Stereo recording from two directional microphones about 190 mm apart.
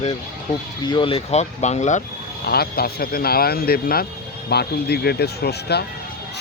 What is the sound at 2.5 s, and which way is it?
Speech, 55° left (ahead or behind).